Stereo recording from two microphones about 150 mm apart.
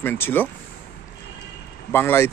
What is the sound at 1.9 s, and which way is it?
Speech, 15° left (ahead or behind).